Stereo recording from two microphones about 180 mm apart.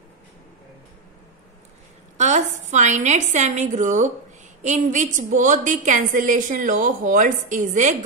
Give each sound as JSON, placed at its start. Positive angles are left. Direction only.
{"t": 2.1, "sound": "a woman's voice", "side_deg": -40}